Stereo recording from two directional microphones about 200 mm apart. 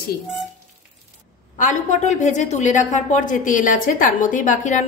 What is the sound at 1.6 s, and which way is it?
A woman's voice, 40° left (ahead or behind).